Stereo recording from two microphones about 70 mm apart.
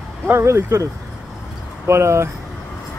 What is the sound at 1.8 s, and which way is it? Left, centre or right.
Speech, right.